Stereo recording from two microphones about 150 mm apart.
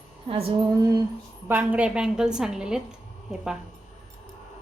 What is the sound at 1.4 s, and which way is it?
A woman's voice, 10° right (ahead or behind).